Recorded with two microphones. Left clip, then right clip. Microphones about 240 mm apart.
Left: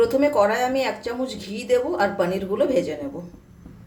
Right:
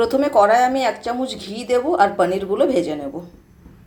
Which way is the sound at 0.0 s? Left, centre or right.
Centre.